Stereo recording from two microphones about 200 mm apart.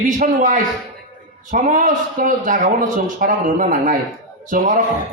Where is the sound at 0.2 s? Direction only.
40° right (ahead or behind).